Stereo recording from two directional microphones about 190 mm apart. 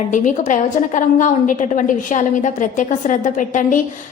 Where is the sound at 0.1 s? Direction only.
40° left (ahead or behind).